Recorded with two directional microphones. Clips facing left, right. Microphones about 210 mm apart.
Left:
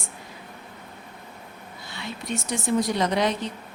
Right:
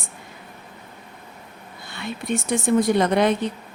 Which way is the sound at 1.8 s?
55° right (ahead or behind).